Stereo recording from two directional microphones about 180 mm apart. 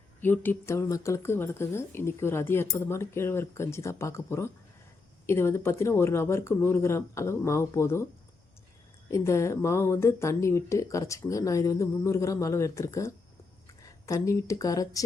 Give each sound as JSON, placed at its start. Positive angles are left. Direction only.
{"t": 0.2, "sound": "speech", "side_deg": 10}
{"t": 9.0, "sound": "speech", "side_deg": 15}